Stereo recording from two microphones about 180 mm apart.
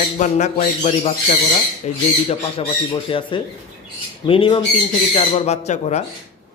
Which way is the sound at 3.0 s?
30° left (ahead or behind).